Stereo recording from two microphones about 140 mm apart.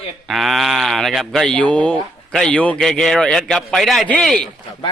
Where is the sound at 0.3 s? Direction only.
Centre (ahead or behind).